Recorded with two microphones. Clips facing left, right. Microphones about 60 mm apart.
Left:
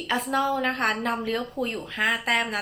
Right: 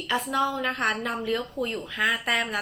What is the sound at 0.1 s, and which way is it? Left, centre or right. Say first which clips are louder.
Speech: left 1 dB; left.